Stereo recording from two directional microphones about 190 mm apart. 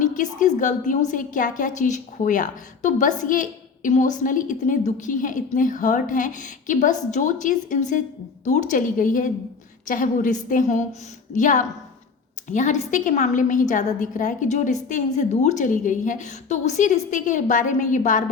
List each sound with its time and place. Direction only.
0.0 s a woman's voice: 45° left (ahead or behind)